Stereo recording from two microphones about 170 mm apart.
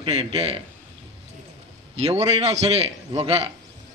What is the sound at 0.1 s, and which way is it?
Speech, 40° right (ahead or behind).